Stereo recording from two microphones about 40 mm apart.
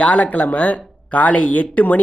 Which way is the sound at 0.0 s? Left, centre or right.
Left.